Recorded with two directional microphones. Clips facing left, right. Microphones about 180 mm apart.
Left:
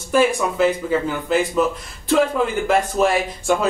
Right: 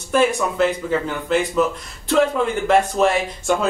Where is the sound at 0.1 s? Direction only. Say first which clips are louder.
Left 1 dB; 5° left (ahead or behind).